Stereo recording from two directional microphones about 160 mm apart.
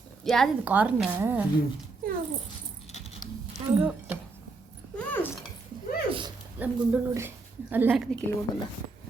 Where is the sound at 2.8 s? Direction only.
40° left (ahead or behind).